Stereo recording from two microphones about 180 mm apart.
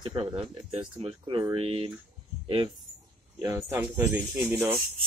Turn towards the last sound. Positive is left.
turn(degrees=-10)  # may be behind; listen again after turning